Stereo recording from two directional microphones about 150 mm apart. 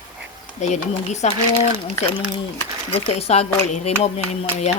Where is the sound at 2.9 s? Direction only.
40° left (ahead or behind).